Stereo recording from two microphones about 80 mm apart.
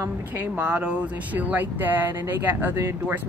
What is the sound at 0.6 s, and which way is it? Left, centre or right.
Speech, centre.